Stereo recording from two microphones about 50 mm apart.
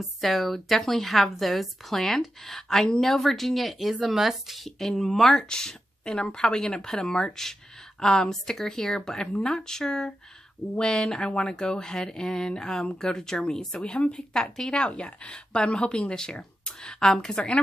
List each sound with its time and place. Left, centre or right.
0.0 s a woman's voice: centre